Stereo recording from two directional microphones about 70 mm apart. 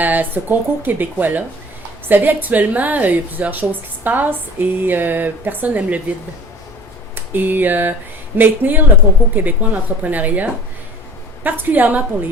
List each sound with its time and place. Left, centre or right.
0.0 s a woman's voice: right
7.2 s a sound: right
8.4 s a woman's voice: right